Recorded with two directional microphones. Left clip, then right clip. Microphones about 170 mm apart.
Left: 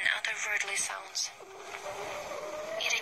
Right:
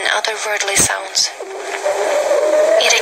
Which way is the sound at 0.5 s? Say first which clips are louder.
Right 16 dB; 40° right (ahead or behind).